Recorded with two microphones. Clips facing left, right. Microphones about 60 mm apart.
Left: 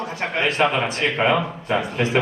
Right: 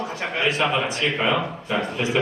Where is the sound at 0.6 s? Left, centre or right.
Left.